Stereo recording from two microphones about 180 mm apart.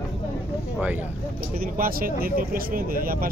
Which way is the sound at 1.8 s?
55° right (ahead or behind).